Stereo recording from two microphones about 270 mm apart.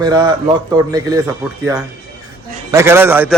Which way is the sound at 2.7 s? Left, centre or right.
Centre.